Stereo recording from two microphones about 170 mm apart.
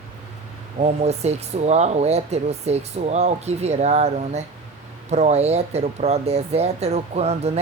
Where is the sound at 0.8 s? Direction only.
40° right (ahead or behind).